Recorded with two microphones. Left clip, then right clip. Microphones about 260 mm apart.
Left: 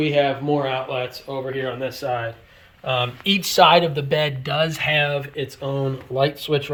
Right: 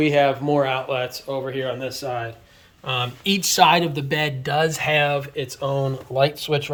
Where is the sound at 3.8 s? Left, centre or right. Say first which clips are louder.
Left 3 dB; centre.